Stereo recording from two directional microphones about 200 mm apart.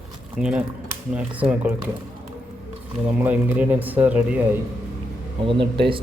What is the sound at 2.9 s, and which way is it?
Speech, 5° right (ahead or behind).